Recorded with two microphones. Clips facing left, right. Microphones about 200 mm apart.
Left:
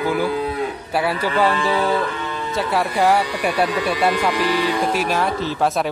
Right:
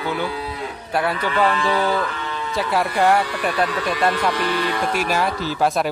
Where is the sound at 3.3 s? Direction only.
10° left (ahead or behind).